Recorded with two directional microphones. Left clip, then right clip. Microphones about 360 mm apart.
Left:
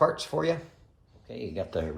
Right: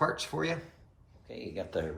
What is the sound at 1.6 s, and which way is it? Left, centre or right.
Speech, centre.